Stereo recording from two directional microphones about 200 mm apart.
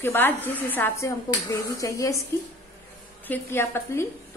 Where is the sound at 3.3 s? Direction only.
10° left (ahead or behind).